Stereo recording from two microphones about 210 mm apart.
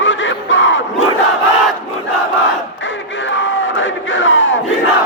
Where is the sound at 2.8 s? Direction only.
65° left (ahead or behind).